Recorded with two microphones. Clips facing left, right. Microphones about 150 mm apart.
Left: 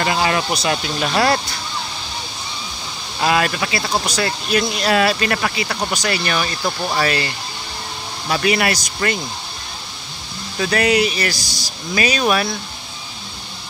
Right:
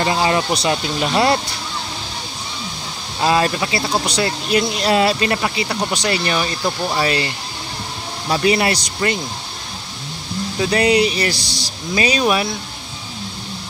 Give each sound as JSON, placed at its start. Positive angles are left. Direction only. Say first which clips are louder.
{"t": 0.0, "sound": "speech", "louder": "right 1 dB", "side_deg": -25}
{"t": 3.2, "sound": "speech", "louder": "right 1 dB", "side_deg": -25}
{"t": 6.6, "sound": "speech", "louder": "right 1 dB", "side_deg": -5}
{"t": 7.0, "sound": "speech", "louder": "right 1 dB", "side_deg": -25}
{"t": 10.6, "sound": "speech", "louder": "right 1 dB", "side_deg": -25}